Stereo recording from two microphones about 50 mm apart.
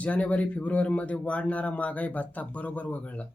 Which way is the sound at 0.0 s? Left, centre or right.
Left.